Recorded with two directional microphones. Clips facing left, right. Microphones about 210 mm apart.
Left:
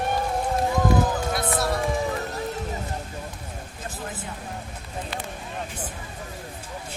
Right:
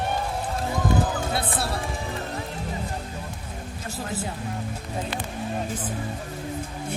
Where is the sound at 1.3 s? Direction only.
30° right (ahead or behind).